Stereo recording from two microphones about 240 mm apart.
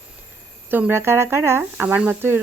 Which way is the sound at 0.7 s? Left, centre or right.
Centre.